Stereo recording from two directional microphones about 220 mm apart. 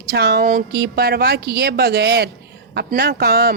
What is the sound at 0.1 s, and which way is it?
A woman's voice, 45° right (ahead or behind).